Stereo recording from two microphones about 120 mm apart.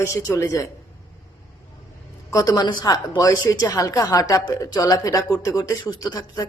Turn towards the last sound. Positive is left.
turn(degrees=30)  # may be behind; listen again after turning